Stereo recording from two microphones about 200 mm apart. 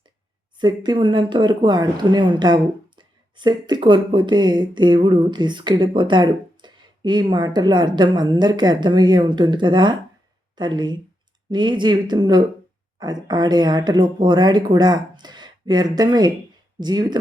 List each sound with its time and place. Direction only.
0.6 s speech: 20° right (ahead or behind)